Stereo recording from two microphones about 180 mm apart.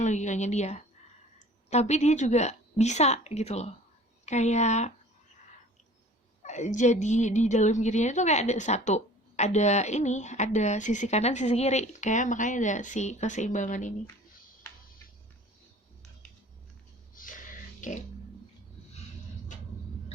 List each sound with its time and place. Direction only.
0.0 s a woman's voice: 40° left (ahead or behind)
6.4 s a woman's voice: 40° left (ahead or behind)
17.2 s a sound: 50° left (ahead or behind)